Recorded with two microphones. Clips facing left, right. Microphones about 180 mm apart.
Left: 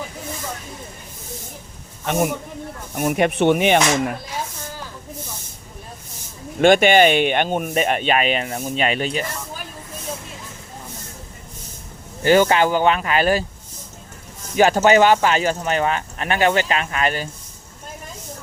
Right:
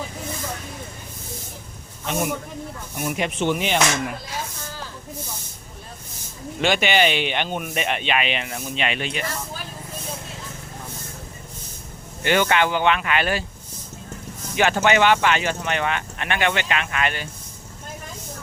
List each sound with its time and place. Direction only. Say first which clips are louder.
2.9 s speech: left 7 dB; 50° left (ahead or behind)
6.6 s speech: left 7 dB; 50° left (ahead or behind)
12.2 s speech: left 5 dB; 35° left (ahead or behind)
14.5 s speech: left 5 dB; 40° left (ahead or behind)